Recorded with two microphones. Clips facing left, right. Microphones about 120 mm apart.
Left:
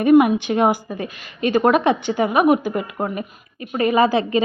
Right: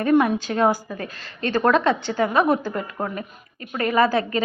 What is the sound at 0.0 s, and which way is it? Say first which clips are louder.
A woman's voice: left 5 dB; 15° left (ahead or behind).